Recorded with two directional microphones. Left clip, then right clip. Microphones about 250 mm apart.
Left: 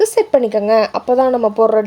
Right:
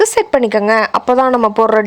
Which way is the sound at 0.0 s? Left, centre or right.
Right.